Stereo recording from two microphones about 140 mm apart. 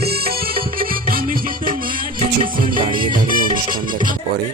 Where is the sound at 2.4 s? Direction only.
85° right.